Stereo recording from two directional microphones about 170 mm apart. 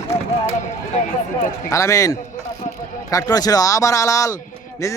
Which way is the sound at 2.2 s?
50° left (ahead or behind).